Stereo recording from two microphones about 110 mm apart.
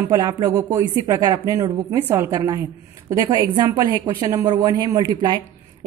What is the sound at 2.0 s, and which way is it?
Speech, 20° right (ahead or behind).